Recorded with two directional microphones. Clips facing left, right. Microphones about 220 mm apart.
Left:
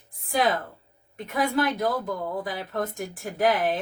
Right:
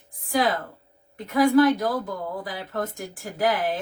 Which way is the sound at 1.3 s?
20° left (ahead or behind).